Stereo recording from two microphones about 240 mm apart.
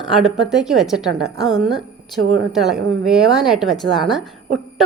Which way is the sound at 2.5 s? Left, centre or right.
Centre.